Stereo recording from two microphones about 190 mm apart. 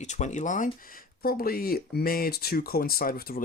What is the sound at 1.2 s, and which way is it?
Speech, 50° left (ahead or behind).